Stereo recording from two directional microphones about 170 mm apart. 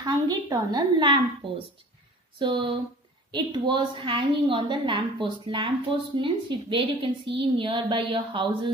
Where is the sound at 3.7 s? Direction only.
30° right (ahead or behind).